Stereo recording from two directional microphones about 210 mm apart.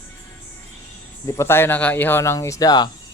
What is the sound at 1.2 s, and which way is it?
Speech, 15° left (ahead or behind).